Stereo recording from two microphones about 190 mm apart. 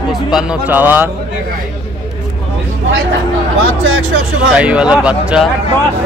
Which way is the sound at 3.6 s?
90° right.